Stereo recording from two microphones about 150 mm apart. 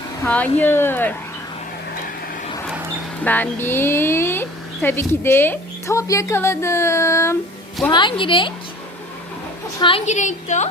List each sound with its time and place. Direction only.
0.3 s a woman's voice: 10° left (ahead or behind)
3.2 s a woman's voice: 10° left (ahead or behind)
7.9 s a woman's voice: 30° left (ahead or behind)
10.1 s a woman's voice: 55° left (ahead or behind)